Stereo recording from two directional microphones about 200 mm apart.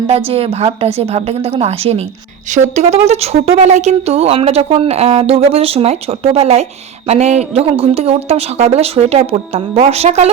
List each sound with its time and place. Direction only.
0.3 s a woman's voice: 30° right (ahead or behind)